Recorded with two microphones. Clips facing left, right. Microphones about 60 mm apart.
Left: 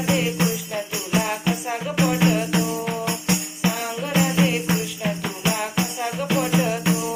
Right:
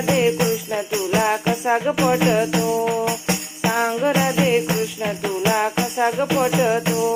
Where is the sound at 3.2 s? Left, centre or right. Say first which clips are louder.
Right 1 dB; right.